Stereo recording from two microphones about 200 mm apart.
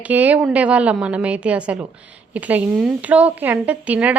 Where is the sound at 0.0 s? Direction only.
10° right (ahead or behind).